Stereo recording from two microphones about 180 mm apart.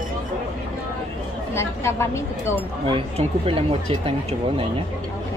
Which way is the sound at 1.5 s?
15° left (ahead or behind).